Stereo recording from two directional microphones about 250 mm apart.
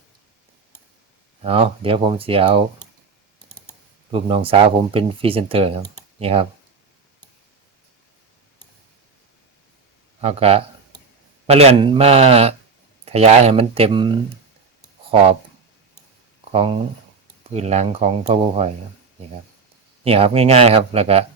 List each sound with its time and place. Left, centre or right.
1.4 s speech: right
4.1 s speech: right
10.2 s speech: right
16.4 s a sound: right
17.4 s speech: right
20.1 s speech: right